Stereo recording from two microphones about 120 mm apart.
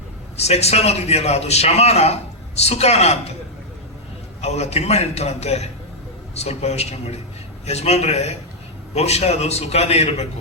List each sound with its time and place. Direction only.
0.3 s a man's voice: 65° left (ahead or behind)
4.4 s a man's voice: 65° left (ahead or behind)